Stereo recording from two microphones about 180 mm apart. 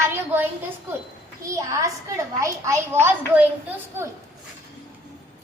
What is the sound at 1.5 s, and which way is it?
A woman's voice, 15° right (ahead or behind).